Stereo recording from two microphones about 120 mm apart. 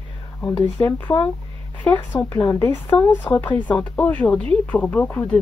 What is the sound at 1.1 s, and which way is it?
Speech, 30° left (ahead or behind).